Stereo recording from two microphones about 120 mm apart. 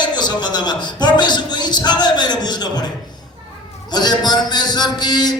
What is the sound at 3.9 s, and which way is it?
Speech, 35° left (ahead or behind).